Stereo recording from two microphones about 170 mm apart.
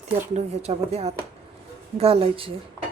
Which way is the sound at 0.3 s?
40° right (ahead or behind).